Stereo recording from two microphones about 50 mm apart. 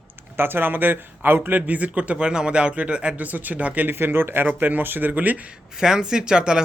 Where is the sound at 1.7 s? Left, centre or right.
Right.